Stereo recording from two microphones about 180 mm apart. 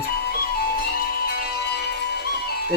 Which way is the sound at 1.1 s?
55° left (ahead or behind).